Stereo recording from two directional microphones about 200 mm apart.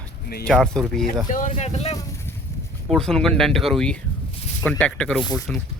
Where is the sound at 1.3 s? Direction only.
40° left (ahead or behind).